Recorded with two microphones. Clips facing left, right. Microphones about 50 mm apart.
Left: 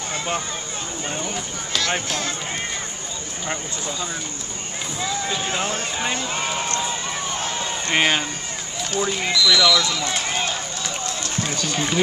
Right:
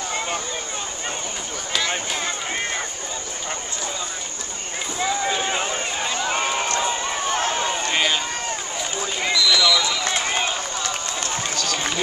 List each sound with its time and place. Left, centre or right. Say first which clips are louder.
2.0 s speech: even; centre
5.0 s speech: right 3 dB; centre
6.4 s run: right 2 dB; centre
7.2 s run: right 8 dB; right
7.5 s a sound: right 3 dB; right
7.9 s speech: left 5 dB; left
9.2 s speech: even; centre
10.1 s run: right 1 dB; centre